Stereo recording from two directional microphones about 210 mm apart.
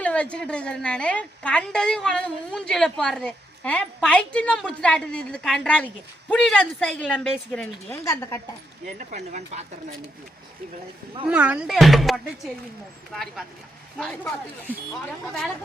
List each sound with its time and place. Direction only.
0.0 s a woman's voice: 5° left (ahead or behind)
9.0 s speech: 35° right (ahead or behind)
11.3 s a woman's voice: 5° right (ahead or behind)